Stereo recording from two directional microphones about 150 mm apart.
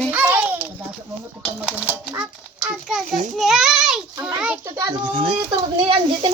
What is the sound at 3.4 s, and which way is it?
A child's voice, centre (ahead or behind).